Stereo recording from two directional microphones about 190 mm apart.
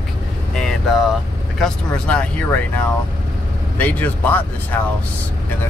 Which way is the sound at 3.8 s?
10° left (ahead or behind).